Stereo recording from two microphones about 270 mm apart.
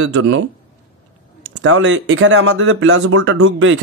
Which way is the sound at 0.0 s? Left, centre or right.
Right.